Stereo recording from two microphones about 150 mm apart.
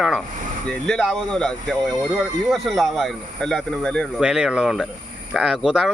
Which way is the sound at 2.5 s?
Centre (ahead or behind).